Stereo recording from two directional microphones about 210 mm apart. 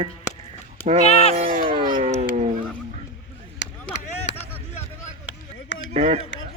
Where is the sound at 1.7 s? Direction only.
20° right (ahead or behind).